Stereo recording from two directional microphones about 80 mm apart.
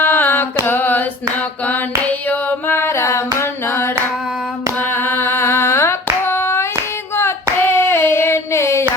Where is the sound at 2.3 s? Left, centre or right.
Left.